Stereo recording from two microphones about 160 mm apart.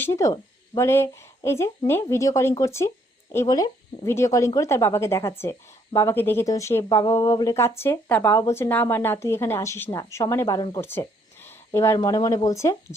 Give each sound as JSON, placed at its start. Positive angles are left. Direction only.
{"t": 0.0, "sound": "speech", "side_deg": 15}